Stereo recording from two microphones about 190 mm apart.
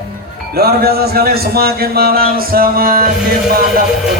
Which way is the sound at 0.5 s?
55° right (ahead or behind).